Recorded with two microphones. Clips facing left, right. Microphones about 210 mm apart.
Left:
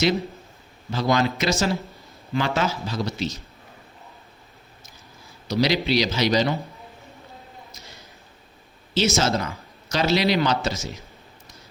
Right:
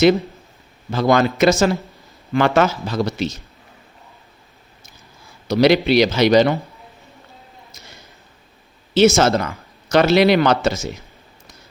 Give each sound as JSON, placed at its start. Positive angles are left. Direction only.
{"t": 0.9, "sound": "a man's voice", "side_deg": -55}
{"t": 5.5, "sound": "a man's voice", "side_deg": -60}
{"t": 9.0, "sound": "a man's voice", "side_deg": -55}